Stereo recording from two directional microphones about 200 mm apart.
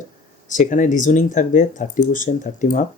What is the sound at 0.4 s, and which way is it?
Speech, 40° left (ahead or behind).